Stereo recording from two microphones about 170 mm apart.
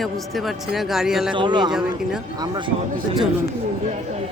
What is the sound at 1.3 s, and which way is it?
Speech, 25° right (ahead or behind).